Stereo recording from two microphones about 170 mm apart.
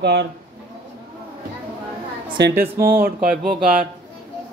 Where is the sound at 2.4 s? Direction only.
80° right.